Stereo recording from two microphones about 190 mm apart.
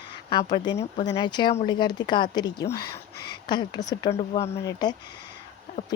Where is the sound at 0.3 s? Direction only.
25° left (ahead or behind).